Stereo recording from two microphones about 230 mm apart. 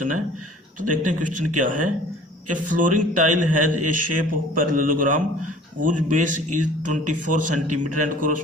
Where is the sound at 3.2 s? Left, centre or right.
Right.